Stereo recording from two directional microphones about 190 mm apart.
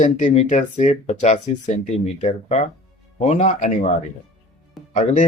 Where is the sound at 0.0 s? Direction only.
40° left (ahead or behind).